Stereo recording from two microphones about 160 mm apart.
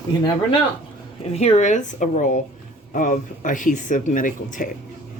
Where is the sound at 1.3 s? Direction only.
40° left (ahead or behind).